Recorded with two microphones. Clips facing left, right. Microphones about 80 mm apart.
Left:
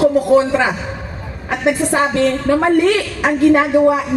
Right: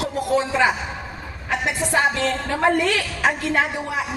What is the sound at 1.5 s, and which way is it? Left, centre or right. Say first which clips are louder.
A woman's voice: left 7 dB; left.